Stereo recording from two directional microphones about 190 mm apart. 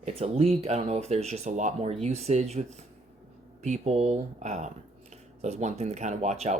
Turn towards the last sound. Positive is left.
turn(degrees=-35)  # may be behind; listen again after turning